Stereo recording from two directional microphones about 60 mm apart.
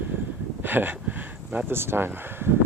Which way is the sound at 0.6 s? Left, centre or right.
Right.